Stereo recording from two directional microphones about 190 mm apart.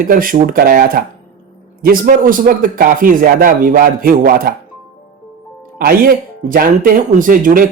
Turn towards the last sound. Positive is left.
turn(degrees=-45)  # may be behind; listen again after turning